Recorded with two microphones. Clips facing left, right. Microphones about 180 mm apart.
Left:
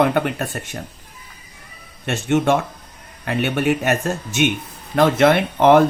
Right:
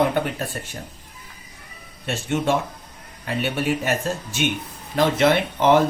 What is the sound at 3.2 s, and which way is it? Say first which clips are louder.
Speech: left 4 dB; 60° left (ahead or behind).